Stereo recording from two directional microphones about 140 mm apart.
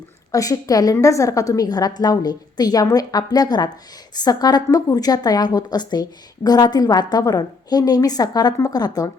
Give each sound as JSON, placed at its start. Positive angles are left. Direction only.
{"t": 0.3, "sound": "a woman's voice", "side_deg": 25}